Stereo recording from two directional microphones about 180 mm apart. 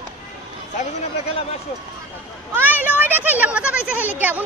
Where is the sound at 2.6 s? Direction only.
10° right (ahead or behind).